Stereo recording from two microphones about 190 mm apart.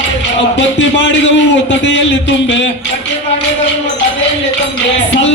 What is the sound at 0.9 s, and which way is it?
A man's voice, 70° left (ahead or behind).